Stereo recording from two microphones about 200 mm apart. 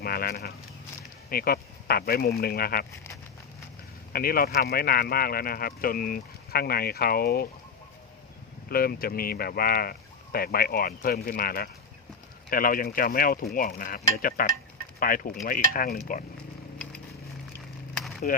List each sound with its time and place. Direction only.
0.0 s speech: 50° left (ahead or behind)
4.1 s speech: 45° left (ahead or behind)
8.7 s speech: 45° left (ahead or behind)
18.2 s speech: 45° left (ahead or behind)